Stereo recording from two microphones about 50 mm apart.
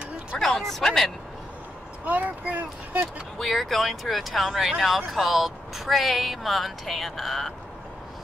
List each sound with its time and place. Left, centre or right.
0.4 s speech: centre
2.0 s speech: right
3.3 s speech: centre